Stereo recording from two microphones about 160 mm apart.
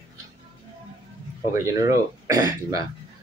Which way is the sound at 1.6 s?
20° right (ahead or behind).